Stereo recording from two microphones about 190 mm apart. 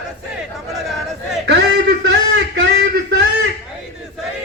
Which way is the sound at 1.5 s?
65° right (ahead or behind).